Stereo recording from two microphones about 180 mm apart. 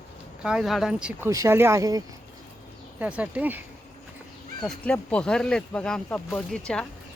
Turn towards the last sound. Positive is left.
turn(degrees=10)  # may be behind; listen again after turning